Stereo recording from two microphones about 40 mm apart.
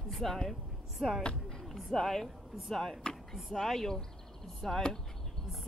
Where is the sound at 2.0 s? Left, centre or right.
Centre.